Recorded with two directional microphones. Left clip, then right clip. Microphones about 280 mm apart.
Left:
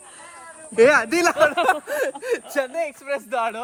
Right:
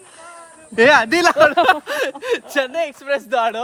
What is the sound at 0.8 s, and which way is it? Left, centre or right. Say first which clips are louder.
A man's voice: right 3 dB; right.